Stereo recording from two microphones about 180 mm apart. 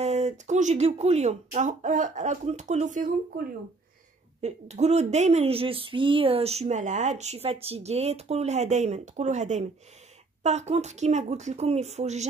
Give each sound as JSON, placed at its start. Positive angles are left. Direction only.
{"t": 0.0, "sound": "speech", "side_deg": -40}